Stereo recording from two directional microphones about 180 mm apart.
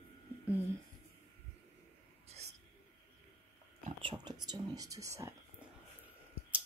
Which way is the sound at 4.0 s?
25° right (ahead or behind).